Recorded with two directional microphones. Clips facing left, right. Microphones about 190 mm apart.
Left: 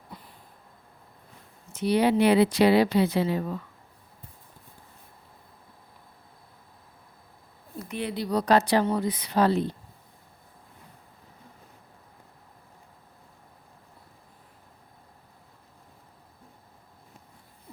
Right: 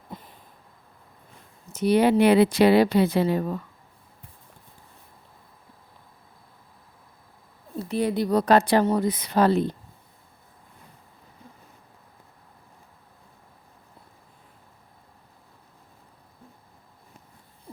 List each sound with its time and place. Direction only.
0.1 s a sound: 20° right (ahead or behind)
1.7 s speech: 45° right (ahead or behind)
7.8 s speech: 35° right (ahead or behind)